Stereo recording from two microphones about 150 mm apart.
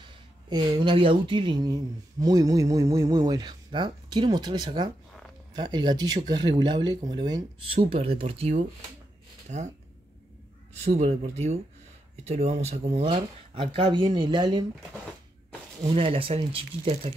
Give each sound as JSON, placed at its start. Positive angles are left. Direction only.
{"t": 0.5, "sound": "speech", "side_deg": -35}
{"t": 10.8, "sound": "speech", "side_deg": -45}
{"t": 12.3, "sound": "speech", "side_deg": -45}
{"t": 15.9, "sound": "speech", "side_deg": -40}